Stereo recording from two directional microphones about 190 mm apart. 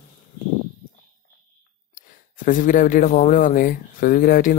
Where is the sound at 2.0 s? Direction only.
45° left (ahead or behind).